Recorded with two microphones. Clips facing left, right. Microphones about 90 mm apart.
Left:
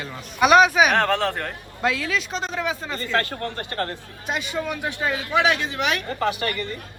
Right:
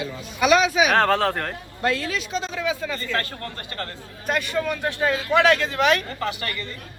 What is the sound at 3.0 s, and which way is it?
Speech, 35° left (ahead or behind).